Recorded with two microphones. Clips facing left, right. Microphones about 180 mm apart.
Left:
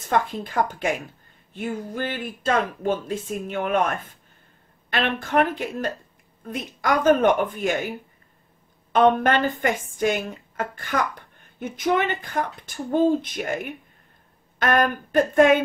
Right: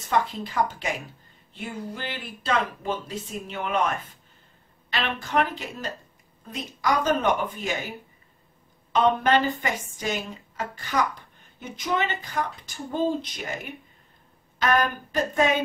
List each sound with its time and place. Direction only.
0.1 s speech: 50° left (ahead or behind)
8.9 s speech: 50° left (ahead or behind)